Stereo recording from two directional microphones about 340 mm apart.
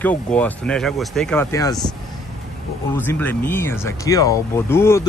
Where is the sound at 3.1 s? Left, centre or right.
Centre.